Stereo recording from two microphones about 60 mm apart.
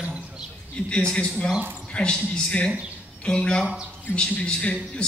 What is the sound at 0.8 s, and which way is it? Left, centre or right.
Speech, centre.